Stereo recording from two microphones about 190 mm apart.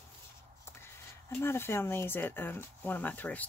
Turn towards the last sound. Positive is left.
turn(degrees=10)  # may be behind; listen again after turning